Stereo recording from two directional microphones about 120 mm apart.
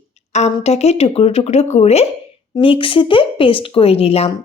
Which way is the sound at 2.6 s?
45° left (ahead or behind).